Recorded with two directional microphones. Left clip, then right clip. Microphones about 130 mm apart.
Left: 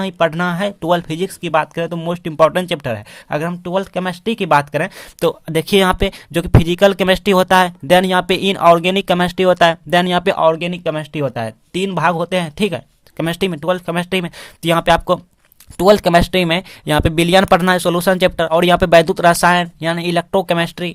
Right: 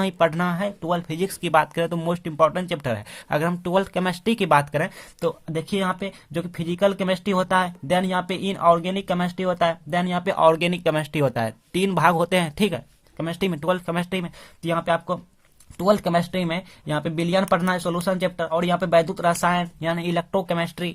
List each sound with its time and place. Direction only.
0.0 s speech: 25° left (ahead or behind)
1.2 s speech: 25° left (ahead or behind)
2.2 s speech: 40° left (ahead or behind)
2.7 s speech: 25° left (ahead or behind)
5.2 s speech: 55° left (ahead or behind)
10.4 s speech: 15° left (ahead or behind)
13.1 s speech: 45° left (ahead or behind)
13.4 s speech: 25° left (ahead or behind)
14.6 s speech: 55° left (ahead or behind); by 20.9 s 35° left (ahead or behind)